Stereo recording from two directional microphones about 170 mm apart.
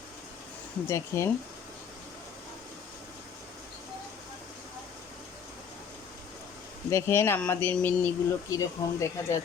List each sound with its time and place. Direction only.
0.9 s speech: 15° left (ahead or behind)
6.9 s speech: 15° left (ahead or behind)